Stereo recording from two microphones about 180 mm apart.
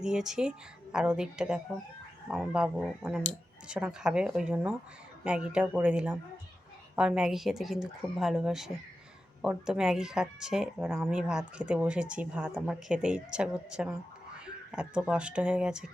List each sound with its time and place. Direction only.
0.0 s speech: 5° right (ahead or behind)